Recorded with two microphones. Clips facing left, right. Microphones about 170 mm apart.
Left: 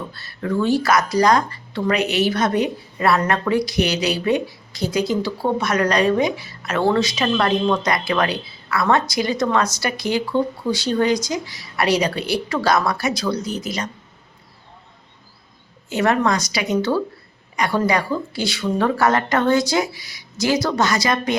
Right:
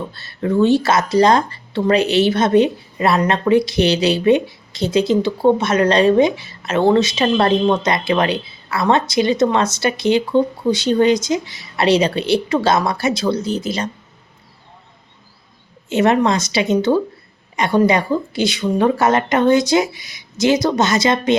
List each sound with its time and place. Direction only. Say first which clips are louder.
0.1 s speech: right 4 dB; 25° right (ahead or behind)
15.9 s speech: right 4 dB; 20° right (ahead or behind)